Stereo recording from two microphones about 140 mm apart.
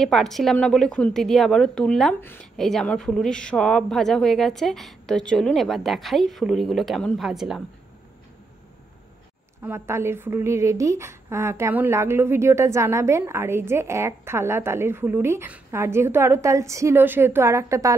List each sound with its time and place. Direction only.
0.0 s a woman's voice: centre (ahead or behind)
9.6 s speech: 20° right (ahead or behind)